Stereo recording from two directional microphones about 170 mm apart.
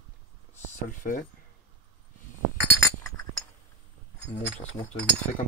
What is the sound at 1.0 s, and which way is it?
Speech, 50° left (ahead or behind).